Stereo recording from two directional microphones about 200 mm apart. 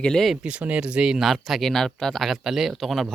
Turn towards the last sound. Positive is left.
turn(degrees=0)  # may be behind; listen again after turning